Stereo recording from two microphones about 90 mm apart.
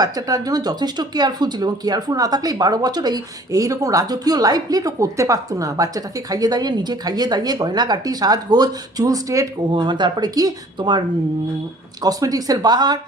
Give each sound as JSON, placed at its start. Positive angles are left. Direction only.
{"t": 0.0, "sound": "speech", "side_deg": -40}
{"t": 9.7, "sound": "speech", "side_deg": -60}
{"t": 10.8, "sound": "speech", "side_deg": -60}
{"t": 12.0, "sound": "speech", "side_deg": -45}